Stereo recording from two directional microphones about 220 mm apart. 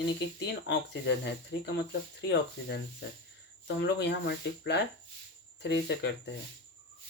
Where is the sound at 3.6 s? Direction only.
50° left (ahead or behind).